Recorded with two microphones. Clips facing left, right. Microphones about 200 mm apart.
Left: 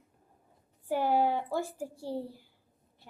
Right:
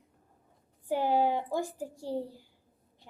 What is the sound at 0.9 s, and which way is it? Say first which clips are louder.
A child's voice: even; 15° right (ahead or behind).